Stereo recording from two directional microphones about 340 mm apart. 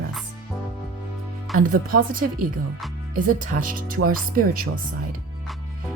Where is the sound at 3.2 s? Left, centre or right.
Right.